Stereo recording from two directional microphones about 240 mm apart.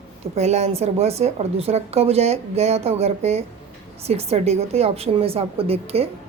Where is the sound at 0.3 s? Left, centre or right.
Right.